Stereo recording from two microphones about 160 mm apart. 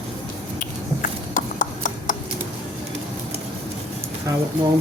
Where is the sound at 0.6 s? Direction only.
55° left (ahead or behind).